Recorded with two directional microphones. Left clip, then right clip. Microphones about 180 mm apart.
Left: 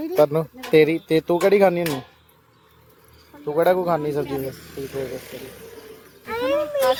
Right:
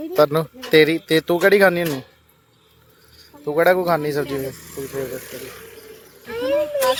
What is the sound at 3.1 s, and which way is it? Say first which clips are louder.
Speech: right 2 dB; 5° right (ahead or behind).